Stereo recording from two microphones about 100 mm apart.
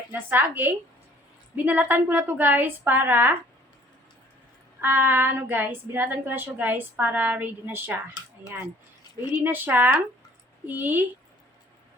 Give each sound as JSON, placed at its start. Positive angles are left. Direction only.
{"t": 0.1, "sound": "a woman's voice", "side_deg": -20}
{"t": 4.8, "sound": "a woman's voice", "side_deg": -20}
{"t": 9.3, "sound": "a woman's voice", "side_deg": -20}